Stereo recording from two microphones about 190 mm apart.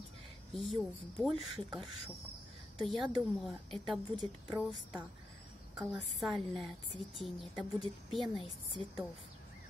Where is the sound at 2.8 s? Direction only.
Centre (ahead or behind).